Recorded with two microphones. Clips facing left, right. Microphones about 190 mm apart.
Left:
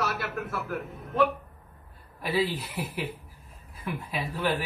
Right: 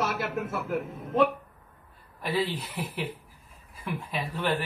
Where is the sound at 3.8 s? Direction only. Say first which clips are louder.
Even; centre (ahead or behind).